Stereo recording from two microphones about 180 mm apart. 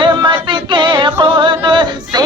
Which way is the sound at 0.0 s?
25° right (ahead or behind).